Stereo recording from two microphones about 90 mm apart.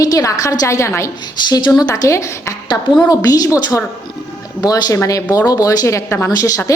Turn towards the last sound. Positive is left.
turn(degrees=40)  # may be behind; listen again after turning